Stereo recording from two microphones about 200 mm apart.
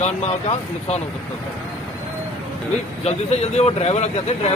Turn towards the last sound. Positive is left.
turn(degrees=35)  # may be behind; listen again after turning